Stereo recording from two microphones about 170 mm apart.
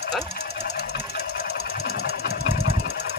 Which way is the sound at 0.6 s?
75° left (ahead or behind).